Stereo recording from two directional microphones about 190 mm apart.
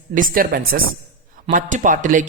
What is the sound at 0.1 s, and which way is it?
Speech, 45° right (ahead or behind).